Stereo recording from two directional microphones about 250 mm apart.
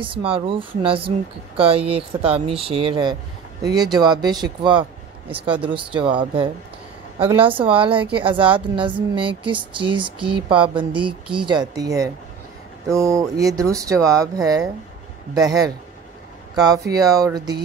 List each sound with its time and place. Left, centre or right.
0.0 s speech: right
7.5 s speech: right